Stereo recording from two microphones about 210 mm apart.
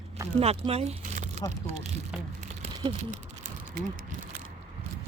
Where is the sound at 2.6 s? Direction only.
30° right (ahead or behind).